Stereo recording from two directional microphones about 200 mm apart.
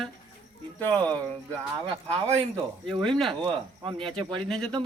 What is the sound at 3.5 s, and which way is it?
Speech, 25° right (ahead or behind).